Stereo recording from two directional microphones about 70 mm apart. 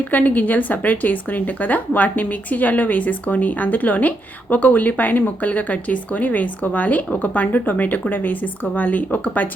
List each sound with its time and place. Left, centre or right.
0.0 s speech: left